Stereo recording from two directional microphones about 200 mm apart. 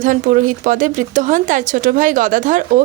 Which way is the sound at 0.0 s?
40° right (ahead or behind).